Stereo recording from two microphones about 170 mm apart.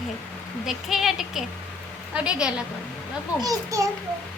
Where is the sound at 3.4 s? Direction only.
20° right (ahead or behind).